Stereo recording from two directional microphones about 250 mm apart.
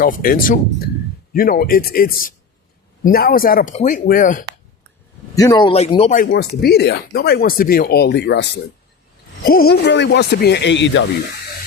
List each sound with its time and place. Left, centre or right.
0.0 s speech: left
5.3 s speech: centre
6.2 s speech: left